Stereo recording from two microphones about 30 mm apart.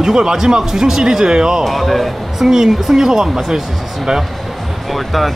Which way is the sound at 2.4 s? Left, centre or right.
Centre.